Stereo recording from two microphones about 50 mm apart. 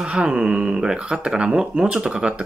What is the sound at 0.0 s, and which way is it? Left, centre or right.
Speech, right.